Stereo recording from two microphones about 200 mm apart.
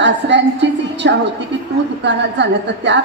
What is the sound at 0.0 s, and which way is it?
A woman's voice, 60° right (ahead or behind).